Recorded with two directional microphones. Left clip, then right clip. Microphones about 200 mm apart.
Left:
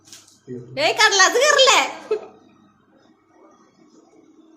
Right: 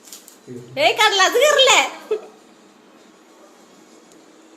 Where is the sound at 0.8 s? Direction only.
Centre (ahead or behind).